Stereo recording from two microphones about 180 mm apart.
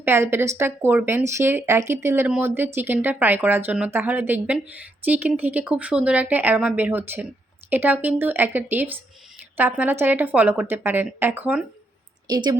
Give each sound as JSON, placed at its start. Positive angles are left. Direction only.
{"t": 0.0, "sound": "speech", "side_deg": -10}
{"t": 12.3, "sound": "a woman's voice", "side_deg": -20}